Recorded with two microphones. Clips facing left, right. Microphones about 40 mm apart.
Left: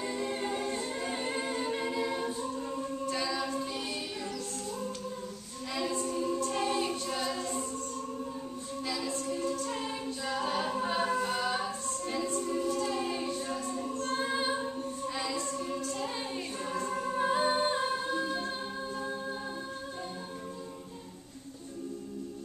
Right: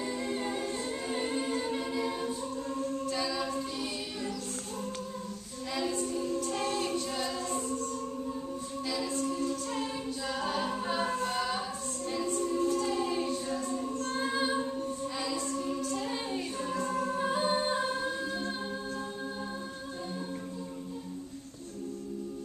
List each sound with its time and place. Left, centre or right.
0.0 s a capella: centre
5.8 s choir: centre
8.8 s music: centre
9.2 s music: centre
9.8 s a capella: centre
11.2 s music: centre
12.4 s choir: left
12.7 s music: centre
14.1 s female singing: centre
15.1 s music: centre